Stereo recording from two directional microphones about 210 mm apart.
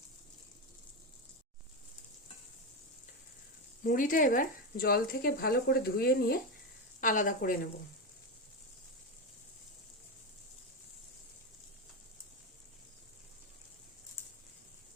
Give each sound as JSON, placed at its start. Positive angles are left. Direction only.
{"t": 3.8, "sound": "a woman's voice", "side_deg": 40}